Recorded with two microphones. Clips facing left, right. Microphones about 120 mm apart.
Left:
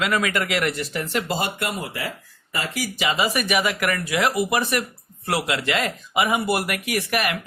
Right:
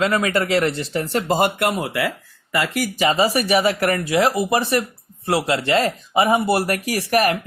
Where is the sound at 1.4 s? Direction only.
60° right (ahead or behind).